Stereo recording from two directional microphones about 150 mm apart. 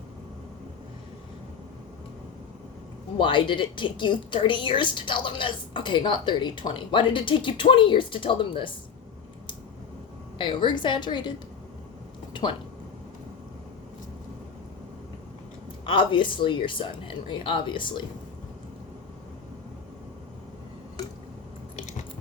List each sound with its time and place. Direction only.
3.2 s a woman's voice: 35° left (ahead or behind)
10.3 s a woman's voice: 35° left (ahead or behind)
12.3 s speech: 30° left (ahead or behind)
15.9 s a woman's voice: 35° left (ahead or behind)
21.8 s biting: 55° left (ahead or behind)